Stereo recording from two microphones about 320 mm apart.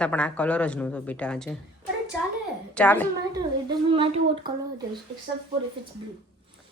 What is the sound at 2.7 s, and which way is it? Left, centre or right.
Speech, centre.